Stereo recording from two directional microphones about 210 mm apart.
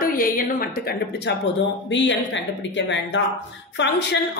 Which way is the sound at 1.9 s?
60° left (ahead or behind).